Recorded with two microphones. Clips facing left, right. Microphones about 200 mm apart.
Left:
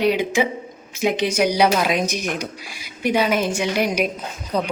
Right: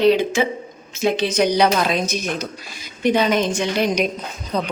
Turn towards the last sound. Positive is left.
turn(degrees=10)  # may be behind; listen again after turning